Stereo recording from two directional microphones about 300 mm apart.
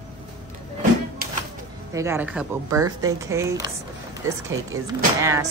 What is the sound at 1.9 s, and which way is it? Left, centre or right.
Speech, centre.